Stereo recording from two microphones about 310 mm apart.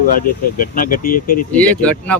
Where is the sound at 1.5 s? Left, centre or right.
Centre.